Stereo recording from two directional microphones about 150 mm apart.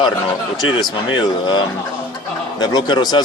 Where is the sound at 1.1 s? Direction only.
30° left (ahead or behind).